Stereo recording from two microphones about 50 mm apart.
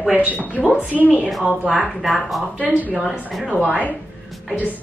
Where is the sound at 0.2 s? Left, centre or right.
Right.